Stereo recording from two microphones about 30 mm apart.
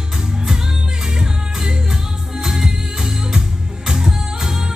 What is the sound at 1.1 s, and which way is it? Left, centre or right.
Music, right.